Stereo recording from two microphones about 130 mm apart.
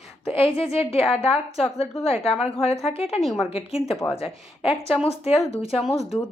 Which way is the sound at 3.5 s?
50° left (ahead or behind).